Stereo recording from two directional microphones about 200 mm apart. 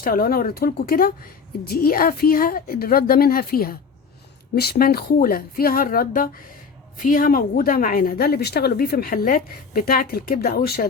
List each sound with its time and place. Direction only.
0.0 s a woman's voice: 45° left (ahead or behind)